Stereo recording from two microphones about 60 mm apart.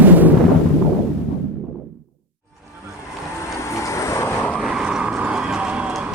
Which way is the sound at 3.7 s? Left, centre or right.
Left.